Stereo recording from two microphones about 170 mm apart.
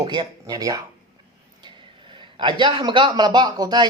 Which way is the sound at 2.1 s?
30° right (ahead or behind).